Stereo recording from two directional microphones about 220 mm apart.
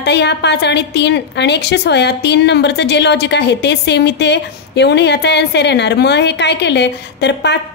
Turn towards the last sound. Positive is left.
turn(degrees=50)  # may be behind; listen again after turning